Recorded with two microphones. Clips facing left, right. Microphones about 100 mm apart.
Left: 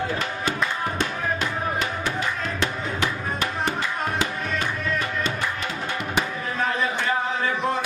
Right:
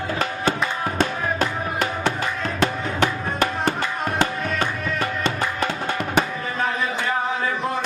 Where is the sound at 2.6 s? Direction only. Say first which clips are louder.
Right 6 dB; 50° right (ahead or behind).